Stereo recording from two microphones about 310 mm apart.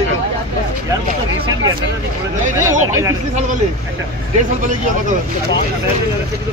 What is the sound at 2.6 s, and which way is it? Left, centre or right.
Speech, centre.